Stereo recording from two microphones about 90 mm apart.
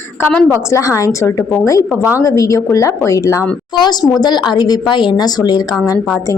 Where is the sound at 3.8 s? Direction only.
55° left (ahead or behind).